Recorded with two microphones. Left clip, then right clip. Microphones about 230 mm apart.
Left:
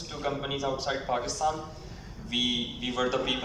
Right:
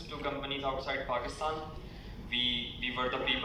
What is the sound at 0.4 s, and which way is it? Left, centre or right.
Speech, left.